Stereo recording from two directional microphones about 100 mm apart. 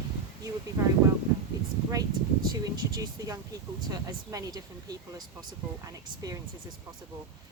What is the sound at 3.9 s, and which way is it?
A woman's voice, 40° right (ahead or behind).